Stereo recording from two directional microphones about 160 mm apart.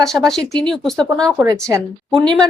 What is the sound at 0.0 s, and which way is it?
Speech, centre (ahead or behind).